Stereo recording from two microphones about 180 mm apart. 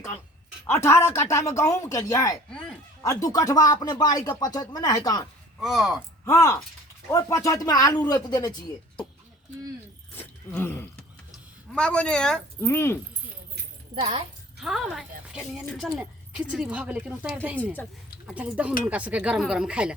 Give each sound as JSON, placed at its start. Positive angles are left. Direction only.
{"t": 0.7, "sound": "speech", "side_deg": 15}
{"t": 2.5, "sound": "a sound", "side_deg": 5}
{"t": 3.2, "sound": "speech", "side_deg": 20}
{"t": 5.5, "sound": "a woman's voice", "side_deg": 0}
{"t": 6.2, "sound": "speech", "side_deg": 15}
{"t": 10.2, "sound": "a sound", "side_deg": 10}
{"t": 11.3, "sound": "speech", "side_deg": 5}
{"t": 14.6, "sound": "a woman's voice", "side_deg": 0}